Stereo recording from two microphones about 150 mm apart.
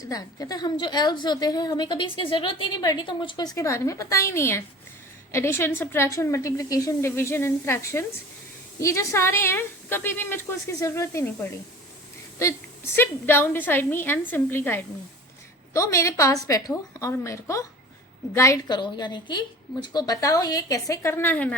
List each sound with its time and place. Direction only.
0.0 s a woman's voice: 25° left (ahead or behind)
13.0 s a woman's voice: 15° left (ahead or behind)